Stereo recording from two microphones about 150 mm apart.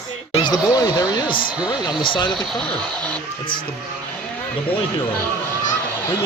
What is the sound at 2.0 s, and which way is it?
Speech, 30° left (ahead or behind).